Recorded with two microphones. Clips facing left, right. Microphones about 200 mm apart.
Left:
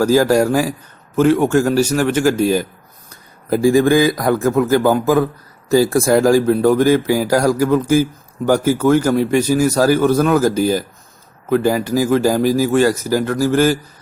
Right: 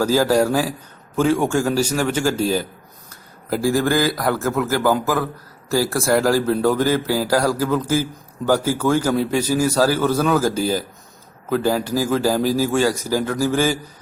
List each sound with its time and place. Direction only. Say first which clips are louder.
0.0 s a man's voice: left 4 dB; 10° left (ahead or behind)